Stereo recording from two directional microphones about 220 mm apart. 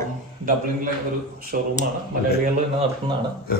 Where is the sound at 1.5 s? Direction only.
45° right (ahead or behind).